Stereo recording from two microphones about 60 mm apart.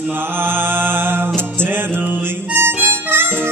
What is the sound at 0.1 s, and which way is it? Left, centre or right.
Music, right.